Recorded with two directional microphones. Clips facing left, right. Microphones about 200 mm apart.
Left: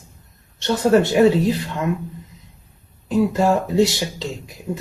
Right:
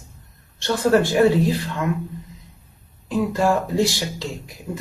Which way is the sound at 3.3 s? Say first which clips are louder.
Left 2 dB; 20° left (ahead or behind).